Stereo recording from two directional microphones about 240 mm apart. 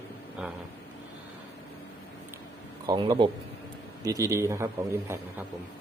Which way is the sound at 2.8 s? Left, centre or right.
Centre.